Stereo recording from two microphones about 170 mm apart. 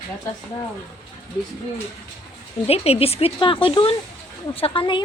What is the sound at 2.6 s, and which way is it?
Speech, 35° left (ahead or behind).